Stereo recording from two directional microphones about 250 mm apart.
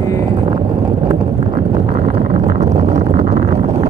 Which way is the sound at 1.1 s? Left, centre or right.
Right.